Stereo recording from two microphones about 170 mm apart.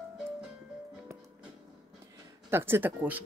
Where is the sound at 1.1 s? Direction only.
15° right (ahead or behind).